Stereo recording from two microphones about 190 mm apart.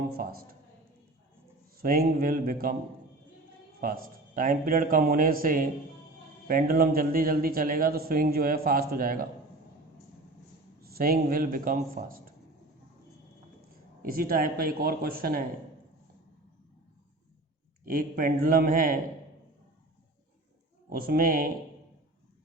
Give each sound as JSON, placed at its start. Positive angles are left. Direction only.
{"t": 0.1, "sound": "a man's voice", "side_deg": -50}
{"t": 1.7, "sound": "a man's voice", "side_deg": -50}
{"t": 3.8, "sound": "a man's voice", "side_deg": -50}
{"t": 10.8, "sound": "a man's voice", "side_deg": -50}
{"t": 14.0, "sound": "a man's voice", "side_deg": -50}
{"t": 17.8, "sound": "a man's voice", "side_deg": -45}
{"t": 20.9, "sound": "a man's voice", "side_deg": -50}